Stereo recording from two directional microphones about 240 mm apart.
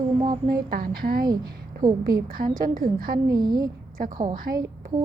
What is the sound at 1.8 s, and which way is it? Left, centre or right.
Speech, centre.